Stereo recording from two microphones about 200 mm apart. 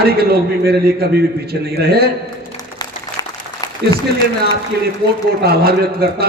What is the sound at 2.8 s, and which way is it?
Applause, 20° left (ahead or behind).